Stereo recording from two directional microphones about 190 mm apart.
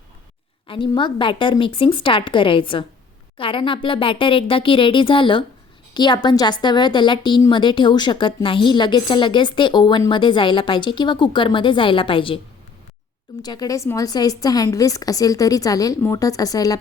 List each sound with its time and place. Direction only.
0.7 s a woman's voice: 25° left (ahead or behind)
13.4 s a woman's voice: 20° left (ahead or behind)